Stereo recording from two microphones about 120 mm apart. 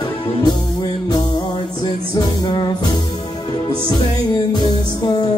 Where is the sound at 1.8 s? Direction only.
35° left (ahead or behind).